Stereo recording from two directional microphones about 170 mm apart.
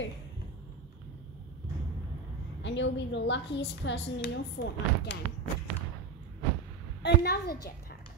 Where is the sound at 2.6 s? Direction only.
90° left.